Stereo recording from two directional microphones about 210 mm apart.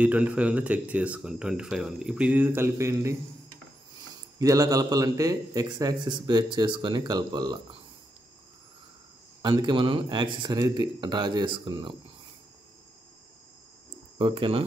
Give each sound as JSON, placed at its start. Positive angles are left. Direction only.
{"t": 0.0, "sound": "speech", "side_deg": -5}
{"t": 4.4, "sound": "a man's voice", "side_deg": -15}
{"t": 9.4, "sound": "a man's voice", "side_deg": -20}
{"t": 14.1, "sound": "speech", "side_deg": -25}